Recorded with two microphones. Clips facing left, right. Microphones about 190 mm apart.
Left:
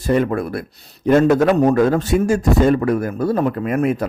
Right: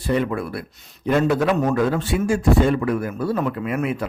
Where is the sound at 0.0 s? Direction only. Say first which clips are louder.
Left 4 dB; 45° left (ahead or behind).